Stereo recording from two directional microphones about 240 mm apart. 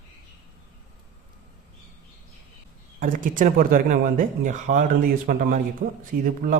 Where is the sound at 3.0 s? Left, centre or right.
Right.